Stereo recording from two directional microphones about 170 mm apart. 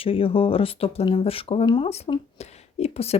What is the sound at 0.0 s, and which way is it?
Speech, 30° left (ahead or behind).